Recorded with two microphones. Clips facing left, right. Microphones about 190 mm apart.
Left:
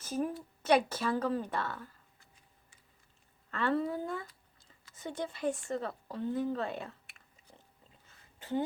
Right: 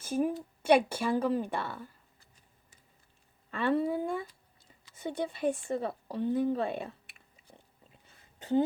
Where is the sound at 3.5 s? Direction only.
15° right (ahead or behind).